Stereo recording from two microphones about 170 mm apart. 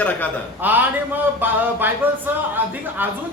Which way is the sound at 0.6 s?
10° right (ahead or behind).